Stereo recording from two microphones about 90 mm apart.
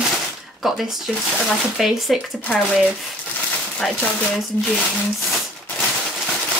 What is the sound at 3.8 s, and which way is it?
Speech, 10° left (ahead or behind).